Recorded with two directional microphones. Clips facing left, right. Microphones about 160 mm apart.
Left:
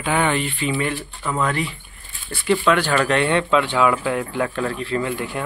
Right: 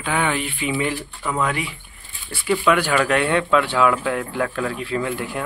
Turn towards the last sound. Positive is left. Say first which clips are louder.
# left 1 dB
turn(degrees=0)  # may be behind; listen again after turning